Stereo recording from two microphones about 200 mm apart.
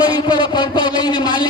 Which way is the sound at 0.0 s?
20° left (ahead or behind).